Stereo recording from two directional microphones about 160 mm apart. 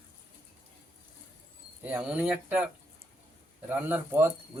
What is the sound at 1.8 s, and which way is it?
Speech, 10° right (ahead or behind).